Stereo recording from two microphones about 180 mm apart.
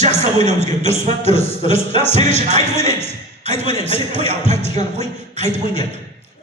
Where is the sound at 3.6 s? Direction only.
30° left (ahead or behind).